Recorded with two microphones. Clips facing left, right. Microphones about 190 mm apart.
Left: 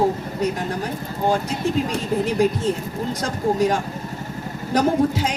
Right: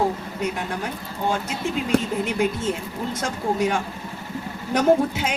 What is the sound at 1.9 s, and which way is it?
Speech, 65° right (ahead or behind).